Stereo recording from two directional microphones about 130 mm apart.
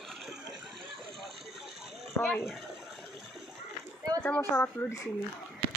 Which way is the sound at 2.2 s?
Centre (ahead or behind).